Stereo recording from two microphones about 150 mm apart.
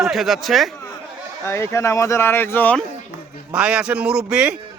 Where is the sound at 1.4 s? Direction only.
20° left (ahead or behind).